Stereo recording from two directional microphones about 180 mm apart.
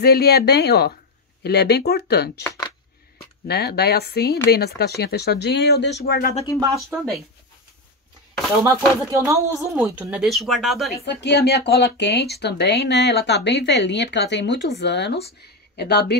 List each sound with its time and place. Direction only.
0.0 s speech: 60° left (ahead or behind)
2.4 s a sound: 20° left (ahead or behind)
3.4 s speech: 65° left (ahead or behind)
8.6 s speech: 15° right (ahead or behind); by 11.0 s centre (ahead or behind)
11.1 s speech: 70° left (ahead or behind)